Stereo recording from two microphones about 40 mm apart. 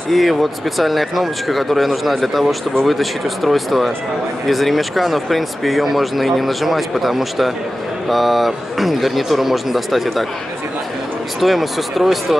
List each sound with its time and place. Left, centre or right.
0.1 s speech: centre
11.4 s speech: centre